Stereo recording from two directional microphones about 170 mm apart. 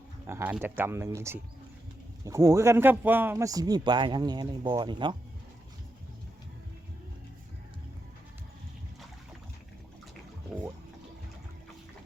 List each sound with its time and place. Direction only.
0.3 s a man's voice: 15° right (ahead or behind)